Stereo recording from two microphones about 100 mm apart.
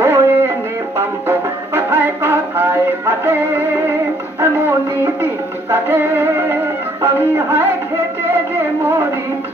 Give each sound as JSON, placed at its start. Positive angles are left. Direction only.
{"t": 0.0, "sound": "music", "side_deg": -25}
{"t": 8.5, "sound": "speech", "side_deg": -25}